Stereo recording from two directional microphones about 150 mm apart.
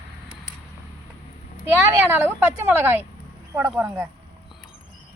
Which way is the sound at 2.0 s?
15° right (ahead or behind).